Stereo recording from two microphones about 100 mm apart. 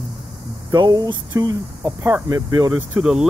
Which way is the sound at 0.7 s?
40° right (ahead or behind).